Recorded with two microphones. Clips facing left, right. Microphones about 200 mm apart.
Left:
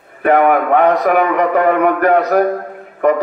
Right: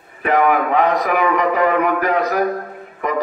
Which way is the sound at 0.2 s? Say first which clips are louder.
Left 4 dB; 55° left (ahead or behind).